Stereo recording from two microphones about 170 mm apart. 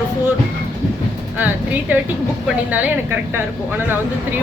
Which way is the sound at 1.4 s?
10° right (ahead or behind).